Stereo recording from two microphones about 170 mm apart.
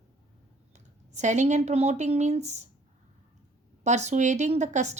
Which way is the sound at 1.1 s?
45° right (ahead or behind).